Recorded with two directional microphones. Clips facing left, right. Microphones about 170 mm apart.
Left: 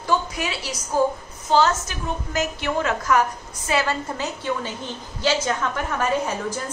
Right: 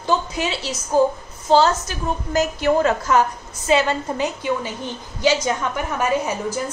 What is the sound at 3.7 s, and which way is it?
A woman's voice, 20° right (ahead or behind).